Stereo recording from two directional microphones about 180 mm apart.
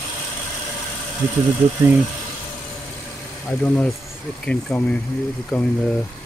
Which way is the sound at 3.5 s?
5° left (ahead or behind).